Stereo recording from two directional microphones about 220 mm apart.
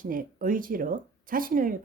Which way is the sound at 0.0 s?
40° right (ahead or behind).